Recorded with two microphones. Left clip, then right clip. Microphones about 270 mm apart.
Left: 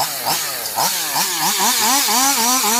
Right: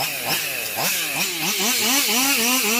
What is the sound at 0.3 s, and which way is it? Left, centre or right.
Chainsaw, left.